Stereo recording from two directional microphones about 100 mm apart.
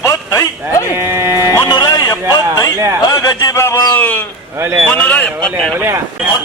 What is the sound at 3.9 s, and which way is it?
Speech, 15° left (ahead or behind).